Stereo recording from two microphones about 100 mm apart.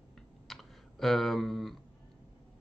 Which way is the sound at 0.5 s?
Centre (ahead or behind).